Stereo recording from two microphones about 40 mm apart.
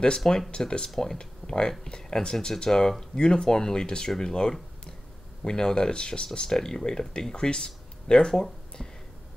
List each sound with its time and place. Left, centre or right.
0.2 s speech: centre
0.5 s speech: centre